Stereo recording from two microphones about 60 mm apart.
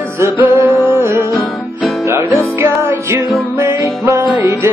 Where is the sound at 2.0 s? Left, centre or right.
Right.